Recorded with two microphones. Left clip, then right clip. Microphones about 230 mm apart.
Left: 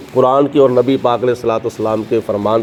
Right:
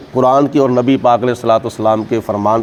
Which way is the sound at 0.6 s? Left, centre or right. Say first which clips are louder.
Left 1 dB; right.